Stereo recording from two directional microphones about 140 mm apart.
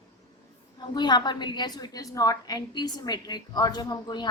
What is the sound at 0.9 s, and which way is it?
A woman's voice, 30° left (ahead or behind).